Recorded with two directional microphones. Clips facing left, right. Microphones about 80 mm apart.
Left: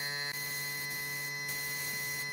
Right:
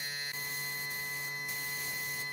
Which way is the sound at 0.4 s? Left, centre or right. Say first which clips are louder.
Even; centre.